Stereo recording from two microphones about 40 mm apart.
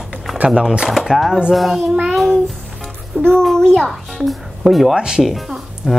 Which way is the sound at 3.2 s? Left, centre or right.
Right.